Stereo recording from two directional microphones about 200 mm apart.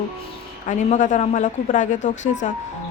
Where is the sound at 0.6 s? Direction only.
40° left (ahead or behind).